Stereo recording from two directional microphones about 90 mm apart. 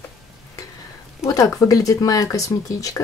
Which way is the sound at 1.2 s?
40° left (ahead or behind).